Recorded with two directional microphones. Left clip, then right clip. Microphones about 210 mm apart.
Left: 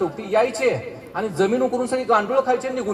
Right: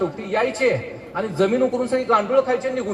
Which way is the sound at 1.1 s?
50° left (ahead or behind).